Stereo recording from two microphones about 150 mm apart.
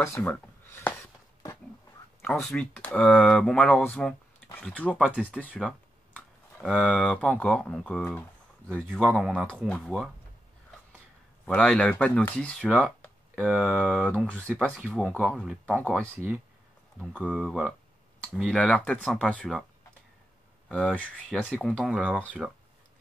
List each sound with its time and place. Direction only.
0.0 s speech: 20° left (ahead or behind)
0.7 s a sound: 15° left (ahead or behind)
2.2 s speech: 5° left (ahead or behind)
6.6 s speech: 5° right (ahead or behind)
7.0 s speech: 5° left (ahead or behind)
11.4 s speech: 5° left (ahead or behind)
12.8 s a sound: 5° left (ahead or behind)
13.5 s speech: 10° right (ahead or behind)
13.7 s speech: 5° left (ahead or behind)
17.3 s speech: 5° right (ahead or behind)
20.6 s speech: 10° left (ahead or behind)